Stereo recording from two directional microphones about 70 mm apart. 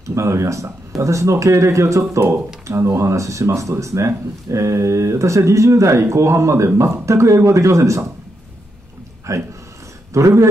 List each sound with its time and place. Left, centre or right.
0.1 s speech: right
9.3 s speech: right